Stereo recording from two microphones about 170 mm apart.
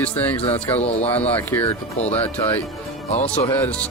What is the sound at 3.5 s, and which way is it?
Speech, 10° left (ahead or behind).